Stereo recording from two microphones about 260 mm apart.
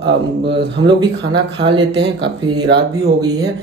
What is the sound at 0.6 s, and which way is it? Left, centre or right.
Speech, right.